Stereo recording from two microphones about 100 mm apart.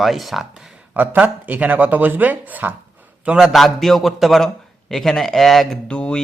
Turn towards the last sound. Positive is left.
turn(degrees=10)  # may be behind; listen again after turning